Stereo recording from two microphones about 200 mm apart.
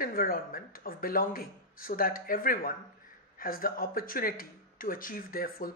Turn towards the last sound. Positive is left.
turn(degrees=45)  # may be behind; listen again after turning